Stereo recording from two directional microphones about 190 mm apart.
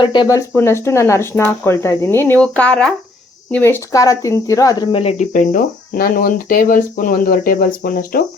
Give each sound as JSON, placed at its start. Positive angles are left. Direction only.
{"t": 0.0, "sound": "speech", "side_deg": 25}